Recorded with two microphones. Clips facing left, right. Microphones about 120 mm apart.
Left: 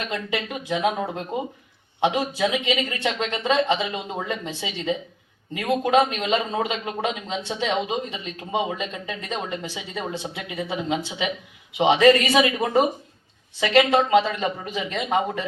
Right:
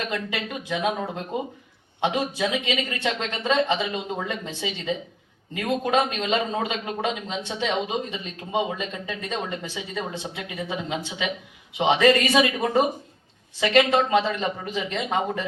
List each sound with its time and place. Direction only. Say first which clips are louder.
0.1 s speech: left 1 dB; 20° left (ahead or behind)